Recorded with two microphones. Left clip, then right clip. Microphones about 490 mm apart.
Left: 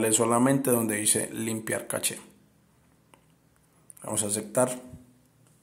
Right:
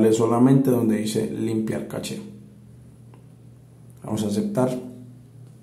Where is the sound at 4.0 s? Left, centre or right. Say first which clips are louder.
Right 5 dB; left.